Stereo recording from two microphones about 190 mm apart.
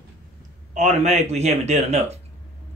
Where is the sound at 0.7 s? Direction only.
35° right (ahead or behind).